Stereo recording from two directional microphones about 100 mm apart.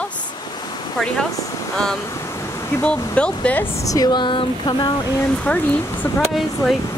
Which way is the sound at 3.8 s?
35° left (ahead or behind).